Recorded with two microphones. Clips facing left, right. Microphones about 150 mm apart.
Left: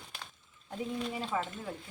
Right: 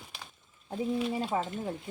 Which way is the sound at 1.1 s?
45° right (ahead or behind).